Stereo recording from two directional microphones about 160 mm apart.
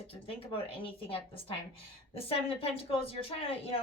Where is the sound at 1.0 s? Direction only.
35° left (ahead or behind).